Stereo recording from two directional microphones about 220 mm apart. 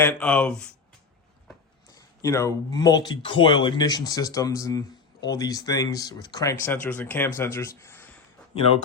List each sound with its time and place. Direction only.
0.0 s speech: 5° left (ahead or behind)
2.2 s speech: 15° left (ahead or behind)